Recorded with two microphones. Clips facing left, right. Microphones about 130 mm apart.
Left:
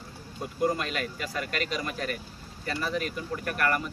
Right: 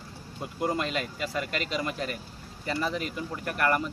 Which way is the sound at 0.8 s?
20° right (ahead or behind).